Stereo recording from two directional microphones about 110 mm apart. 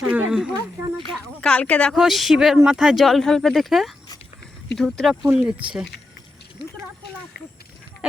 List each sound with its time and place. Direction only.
0.1 s speech: 10° right (ahead or behind)
1.4 s a woman's voice: 10° left (ahead or behind)
2.0 s speech: centre (ahead or behind)